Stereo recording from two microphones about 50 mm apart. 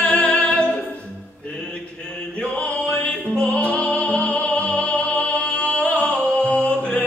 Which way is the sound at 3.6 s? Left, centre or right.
Left.